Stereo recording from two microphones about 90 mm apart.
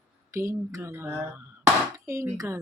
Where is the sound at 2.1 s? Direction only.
35° right (ahead or behind).